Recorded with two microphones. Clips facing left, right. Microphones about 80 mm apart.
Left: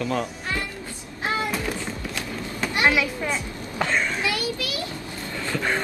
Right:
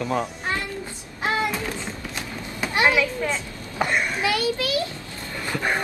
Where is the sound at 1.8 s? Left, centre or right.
Right.